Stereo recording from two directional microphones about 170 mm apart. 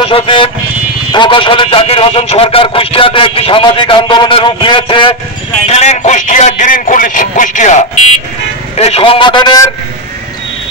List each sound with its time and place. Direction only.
0.0 s a man's voice: 30° left (ahead or behind)
5.7 s a sound: 40° left (ahead or behind)
8.7 s a man's voice: 35° left (ahead or behind)